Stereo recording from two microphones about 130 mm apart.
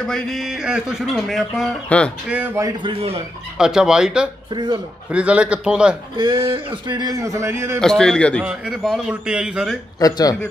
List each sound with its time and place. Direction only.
0.0 s speech: centre (ahead or behind)
2.2 s a man's voice: 10° right (ahead or behind)
2.8 s speech: 45° right (ahead or behind)
3.5 s a man's voice: 5° right (ahead or behind)
6.1 s speech: 35° right (ahead or behind); by 7.8 s 20° right (ahead or behind)
7.8 s a man's voice: 5° left (ahead or behind)
9.9 s speech: 30° left (ahead or behind)